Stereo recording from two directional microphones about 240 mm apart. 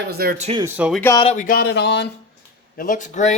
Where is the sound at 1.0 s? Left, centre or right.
Centre.